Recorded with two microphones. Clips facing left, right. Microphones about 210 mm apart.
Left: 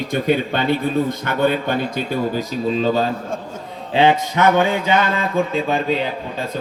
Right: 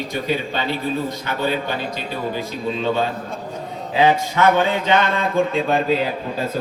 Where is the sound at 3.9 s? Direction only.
25° left (ahead or behind).